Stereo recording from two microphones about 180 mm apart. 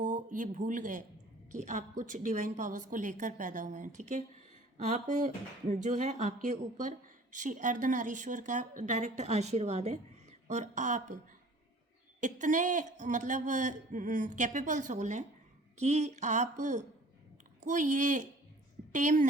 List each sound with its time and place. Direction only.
0.0 s a woman's voice: 45° right (ahead or behind)
12.2 s a woman's voice: 45° right (ahead or behind)